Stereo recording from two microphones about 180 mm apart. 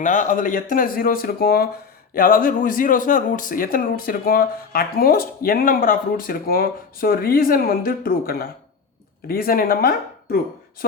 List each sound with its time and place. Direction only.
0.0 s speech: 45° left (ahead or behind)